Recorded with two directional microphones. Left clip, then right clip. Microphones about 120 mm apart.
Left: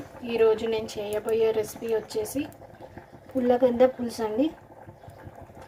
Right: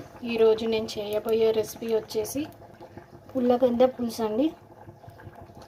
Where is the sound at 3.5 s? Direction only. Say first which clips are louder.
Left 1 dB; 15° right (ahead or behind).